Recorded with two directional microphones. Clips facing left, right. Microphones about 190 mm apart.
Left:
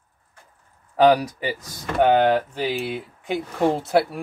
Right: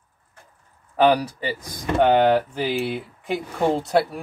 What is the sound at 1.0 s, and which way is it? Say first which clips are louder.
Speech: left 2 dB; 10° left (ahead or behind).